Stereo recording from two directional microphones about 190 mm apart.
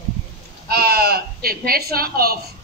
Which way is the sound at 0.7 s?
55° right (ahead or behind).